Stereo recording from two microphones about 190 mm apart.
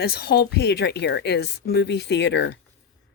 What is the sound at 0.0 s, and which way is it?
A woman's voice, 55° left (ahead or behind).